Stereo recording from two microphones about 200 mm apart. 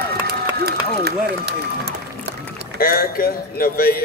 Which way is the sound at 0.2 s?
55° right (ahead or behind).